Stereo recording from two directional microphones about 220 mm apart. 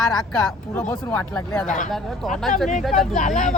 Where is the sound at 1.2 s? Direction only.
5° left (ahead or behind).